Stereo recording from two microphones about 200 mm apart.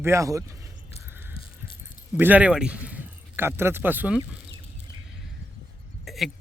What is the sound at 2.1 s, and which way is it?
Speech, 10° right (ahead or behind).